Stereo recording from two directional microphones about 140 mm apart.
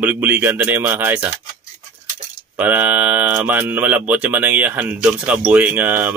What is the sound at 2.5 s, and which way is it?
Speech, 10° right (ahead or behind).